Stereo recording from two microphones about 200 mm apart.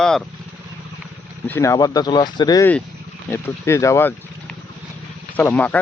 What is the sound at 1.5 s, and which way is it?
Speech, 15° left (ahead or behind).